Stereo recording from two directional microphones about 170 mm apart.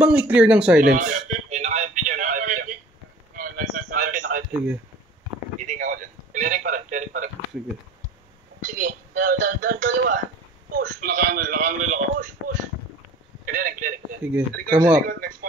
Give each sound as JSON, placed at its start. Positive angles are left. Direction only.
{"t": 0.0, "sound": "speech", "side_deg": -10}
{"t": 0.7, "sound": "a sound", "side_deg": -50}
{"t": 5.7, "sound": "a sound", "side_deg": -50}
{"t": 8.6, "sound": "speech", "side_deg": -55}
{"t": 13.5, "sound": "a man's voice", "side_deg": -55}
{"t": 14.2, "sound": "speech", "side_deg": -10}
{"t": 15.0, "sound": "speech", "side_deg": -55}